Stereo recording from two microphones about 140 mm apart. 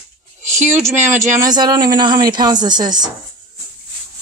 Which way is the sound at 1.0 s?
60° right (ahead or behind).